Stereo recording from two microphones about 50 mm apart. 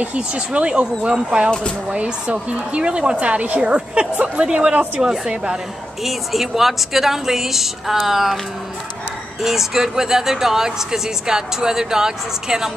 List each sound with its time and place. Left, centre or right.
0.0 s a woman's voice: right
5.0 s speech: centre
6.0 s a woman's voice: centre
9.4 s speech: centre